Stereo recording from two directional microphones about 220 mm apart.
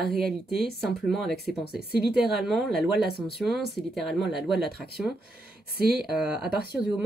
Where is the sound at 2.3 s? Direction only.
Centre (ahead or behind).